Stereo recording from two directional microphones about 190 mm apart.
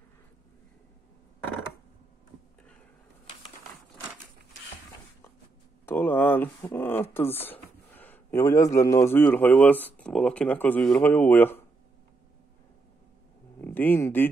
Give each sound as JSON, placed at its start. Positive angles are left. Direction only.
{"t": 5.9, "sound": "speech", "side_deg": 10}
{"t": 7.4, "sound": "a sound", "side_deg": 10}
{"t": 8.7, "sound": "speech", "side_deg": 15}
{"t": 13.6, "sound": "speech", "side_deg": 10}